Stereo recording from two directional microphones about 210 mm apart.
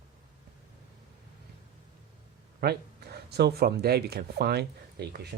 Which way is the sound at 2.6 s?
50° right (ahead or behind).